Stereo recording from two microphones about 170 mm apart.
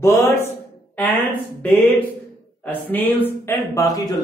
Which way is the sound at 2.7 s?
10° left (ahead or behind).